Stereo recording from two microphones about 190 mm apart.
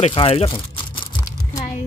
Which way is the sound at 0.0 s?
30° left (ahead or behind).